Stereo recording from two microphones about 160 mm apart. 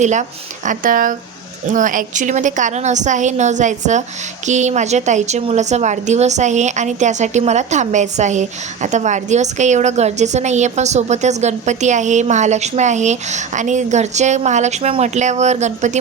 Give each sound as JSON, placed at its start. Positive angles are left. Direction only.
{"t": 0.0, "sound": "a woman's voice", "side_deg": -50}